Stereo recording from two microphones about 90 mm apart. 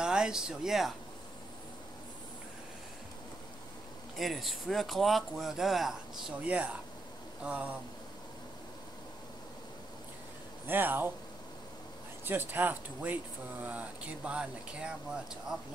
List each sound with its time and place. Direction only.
0.0 s speech: 10° right (ahead or behind)
4.2 s speech: centre (ahead or behind)
6.4 s speech: 15° right (ahead or behind)
10.7 s speech: 20° right (ahead or behind)
12.3 s speech: 20° right (ahead or behind)